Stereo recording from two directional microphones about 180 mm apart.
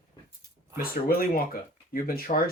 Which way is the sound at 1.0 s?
55° left (ahead or behind).